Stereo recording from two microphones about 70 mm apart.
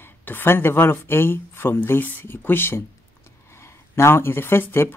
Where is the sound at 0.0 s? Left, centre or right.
Left.